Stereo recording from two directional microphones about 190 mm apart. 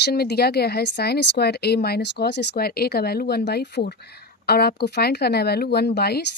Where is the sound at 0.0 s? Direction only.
55° left (ahead or behind).